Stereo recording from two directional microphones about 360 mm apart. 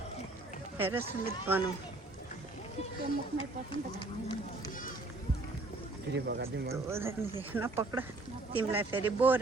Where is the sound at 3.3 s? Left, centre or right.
Centre.